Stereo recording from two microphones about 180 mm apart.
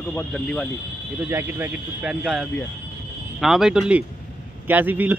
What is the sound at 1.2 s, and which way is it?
Speech, 10° right (ahead or behind).